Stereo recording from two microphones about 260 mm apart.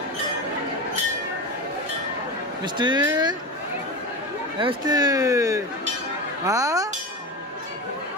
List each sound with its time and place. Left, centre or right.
2.6 s speech: centre
4.6 s speech: centre